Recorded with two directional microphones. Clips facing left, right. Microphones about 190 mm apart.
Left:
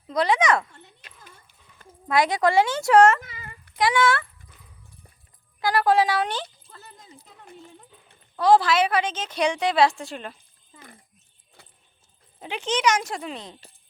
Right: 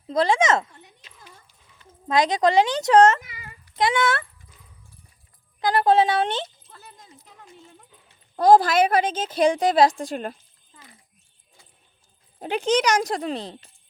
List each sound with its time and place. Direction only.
0.1 s speech: 25° right (ahead or behind)
2.0 s speech: 20° right (ahead or behind)
5.5 s speech: 20° right (ahead or behind)
6.7 s a sound: 5° right (ahead or behind)
8.4 s a woman's voice: 45° right (ahead or behind)
10.8 s a sound: 55° left (ahead or behind)
11.6 s keys jangling: 65° left (ahead or behind)
12.4 s speech: 45° right (ahead or behind)